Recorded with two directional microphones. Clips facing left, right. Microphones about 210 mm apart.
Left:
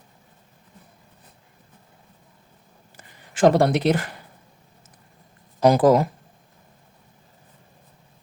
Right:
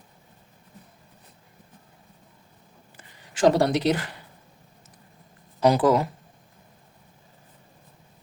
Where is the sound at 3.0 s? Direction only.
55° left (ahead or behind).